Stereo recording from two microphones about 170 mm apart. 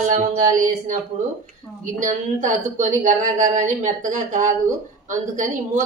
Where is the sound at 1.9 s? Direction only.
50° right (ahead or behind).